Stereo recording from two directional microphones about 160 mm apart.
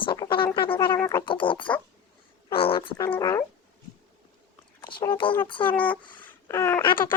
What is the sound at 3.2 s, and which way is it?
Speech, 20° left (ahead or behind).